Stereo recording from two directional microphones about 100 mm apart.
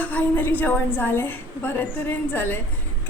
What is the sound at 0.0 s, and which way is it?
A woman's voice, 15° left (ahead or behind).